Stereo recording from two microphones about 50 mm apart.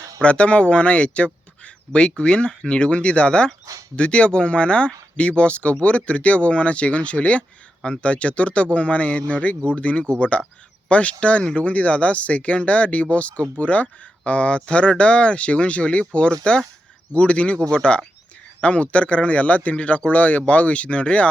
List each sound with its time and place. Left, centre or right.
0.2 s speech: left